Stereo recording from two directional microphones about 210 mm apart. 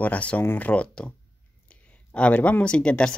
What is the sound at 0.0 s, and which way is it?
Speech, 5° left (ahead or behind).